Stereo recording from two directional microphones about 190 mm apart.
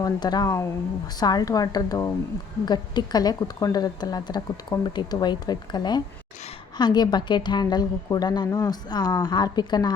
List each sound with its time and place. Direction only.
0.0 s a woman's voice: 20° left (ahead or behind)